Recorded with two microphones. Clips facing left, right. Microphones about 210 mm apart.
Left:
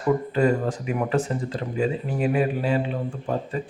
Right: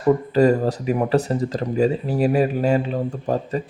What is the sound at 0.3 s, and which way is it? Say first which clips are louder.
Speech: right 5 dB; 40° right (ahead or behind).